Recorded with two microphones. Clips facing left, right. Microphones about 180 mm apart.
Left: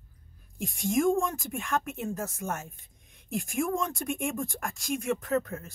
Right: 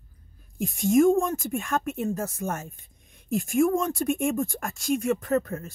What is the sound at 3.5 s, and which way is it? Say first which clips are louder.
Speech: right 7 dB; 40° right (ahead or behind).